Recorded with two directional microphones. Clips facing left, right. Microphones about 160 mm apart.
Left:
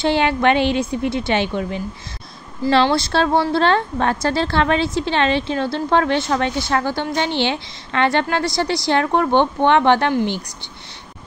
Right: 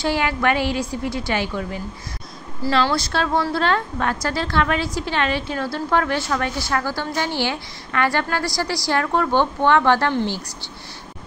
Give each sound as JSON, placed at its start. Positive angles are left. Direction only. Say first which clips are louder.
{"t": 0.0, "sound": "a woman's voice", "louder": "left 4 dB", "side_deg": 25}